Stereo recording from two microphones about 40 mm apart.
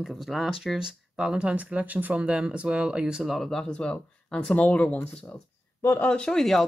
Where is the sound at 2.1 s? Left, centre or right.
Right.